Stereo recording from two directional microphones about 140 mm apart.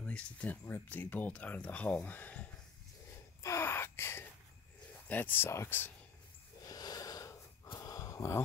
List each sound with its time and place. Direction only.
0.0 s speech: 10° left (ahead or behind)
3.4 s gasp: 15° left (ahead or behind)
5.0 s speech: 10° left (ahead or behind)
6.6 s sniff: 25° left (ahead or behind)